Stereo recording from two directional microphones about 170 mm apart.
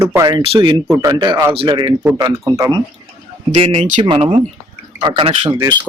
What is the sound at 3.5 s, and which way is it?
Speech, 40° right (ahead or behind).